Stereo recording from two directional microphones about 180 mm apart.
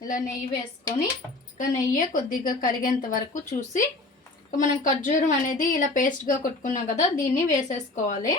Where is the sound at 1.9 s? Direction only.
50° left (ahead or behind).